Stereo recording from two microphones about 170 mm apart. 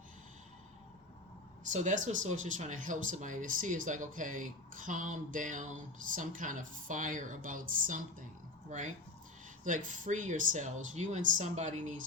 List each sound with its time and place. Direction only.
1.7 s speech: 45° right (ahead or behind)